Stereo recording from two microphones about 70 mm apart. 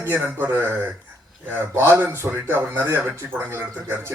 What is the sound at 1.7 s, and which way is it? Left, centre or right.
Speech, right.